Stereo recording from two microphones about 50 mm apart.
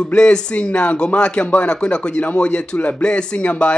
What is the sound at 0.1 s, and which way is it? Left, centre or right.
Speech, centre.